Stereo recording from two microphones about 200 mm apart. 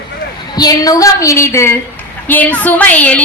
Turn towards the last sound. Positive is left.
turn(degrees=5)  # may be behind; listen again after turning